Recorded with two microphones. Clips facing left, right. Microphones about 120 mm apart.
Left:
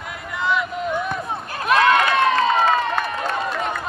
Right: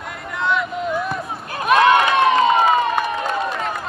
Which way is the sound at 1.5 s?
20° right (ahead or behind).